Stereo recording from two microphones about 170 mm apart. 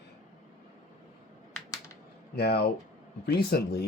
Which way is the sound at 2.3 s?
70° left (ahead or behind).